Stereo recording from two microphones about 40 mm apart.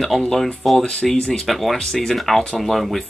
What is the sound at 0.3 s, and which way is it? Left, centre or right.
Speech, centre.